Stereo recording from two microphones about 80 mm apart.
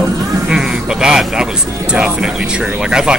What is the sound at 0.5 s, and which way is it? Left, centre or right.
Speech, centre.